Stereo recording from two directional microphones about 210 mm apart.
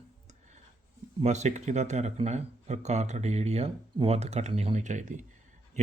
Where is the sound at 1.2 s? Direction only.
35° right (ahead or behind).